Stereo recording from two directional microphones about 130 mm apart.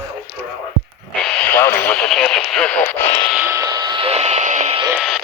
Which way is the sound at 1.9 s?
Centre (ahead or behind).